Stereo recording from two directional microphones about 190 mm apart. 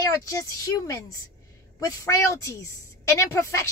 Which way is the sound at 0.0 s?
15° left (ahead or behind).